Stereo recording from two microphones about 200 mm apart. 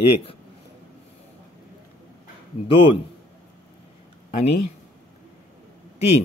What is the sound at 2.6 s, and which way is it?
Speech, 25° left (ahead or behind).